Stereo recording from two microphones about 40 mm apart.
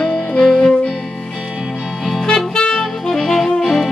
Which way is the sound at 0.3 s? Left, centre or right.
Centre.